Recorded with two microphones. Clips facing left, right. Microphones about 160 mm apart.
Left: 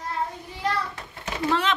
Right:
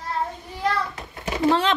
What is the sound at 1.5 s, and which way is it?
Speech, 30° right (ahead or behind).